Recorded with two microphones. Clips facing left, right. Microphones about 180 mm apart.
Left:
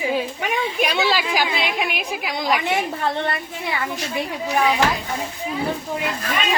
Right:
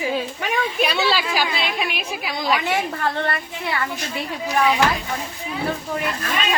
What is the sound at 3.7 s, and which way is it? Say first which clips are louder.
A woman's voice: even; 15° left (ahead or behind).